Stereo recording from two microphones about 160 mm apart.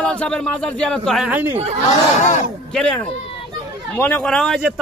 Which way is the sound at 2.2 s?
50° left (ahead or behind).